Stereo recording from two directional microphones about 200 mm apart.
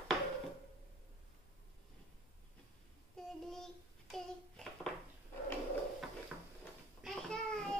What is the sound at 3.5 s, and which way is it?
Child singing, centre (ahead or behind).